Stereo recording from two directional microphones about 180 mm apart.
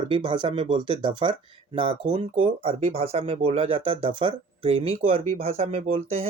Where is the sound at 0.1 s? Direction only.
30° right (ahead or behind).